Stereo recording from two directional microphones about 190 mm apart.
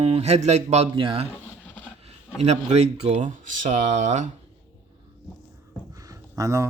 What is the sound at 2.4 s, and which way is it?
Speech, 35° right (ahead or behind).